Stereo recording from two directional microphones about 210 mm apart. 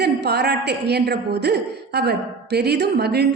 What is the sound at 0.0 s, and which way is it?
A woman's voice, 50° right (ahead or behind).